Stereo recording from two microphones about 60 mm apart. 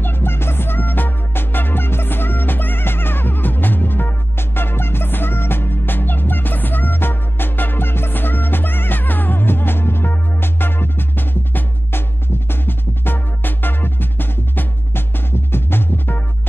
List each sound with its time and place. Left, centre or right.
0.0 s music: left